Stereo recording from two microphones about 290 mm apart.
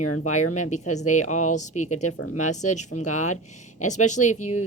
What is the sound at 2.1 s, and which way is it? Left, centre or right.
Speech, left.